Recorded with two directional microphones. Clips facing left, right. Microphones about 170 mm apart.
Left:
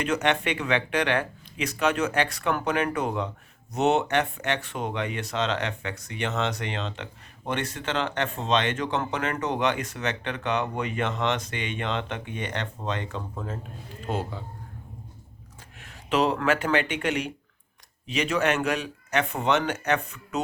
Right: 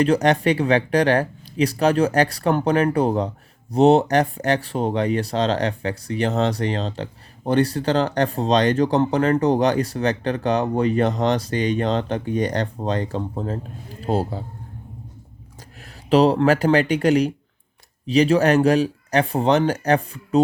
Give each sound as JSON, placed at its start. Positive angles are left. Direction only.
{"t": 0.0, "sound": "speech", "side_deg": -35}
{"t": 15.8, "sound": "speech", "side_deg": -35}